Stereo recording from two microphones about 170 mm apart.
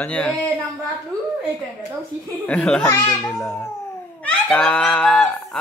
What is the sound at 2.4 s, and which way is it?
Speech, 5° left (ahead or behind).